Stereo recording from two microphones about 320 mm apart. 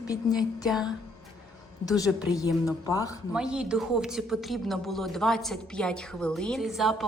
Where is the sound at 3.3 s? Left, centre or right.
Centre.